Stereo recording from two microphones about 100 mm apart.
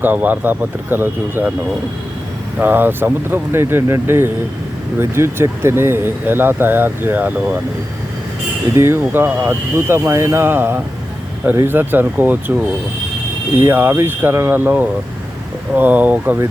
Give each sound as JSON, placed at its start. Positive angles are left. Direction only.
{"t": 0.0, "sound": "speech", "side_deg": -20}
{"t": 2.6, "sound": "speech", "side_deg": -20}
{"t": 8.7, "sound": "speech", "side_deg": -25}
{"t": 13.6, "sound": "speech", "side_deg": -20}